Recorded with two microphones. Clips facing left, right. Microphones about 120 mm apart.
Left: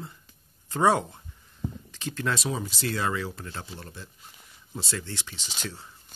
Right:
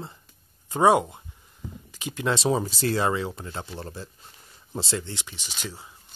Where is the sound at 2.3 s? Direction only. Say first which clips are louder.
Right 7 dB; 30° right (ahead or behind).